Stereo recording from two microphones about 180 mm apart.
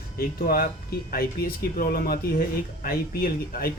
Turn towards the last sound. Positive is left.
turn(degrees=55)  # may be behind; listen again after turning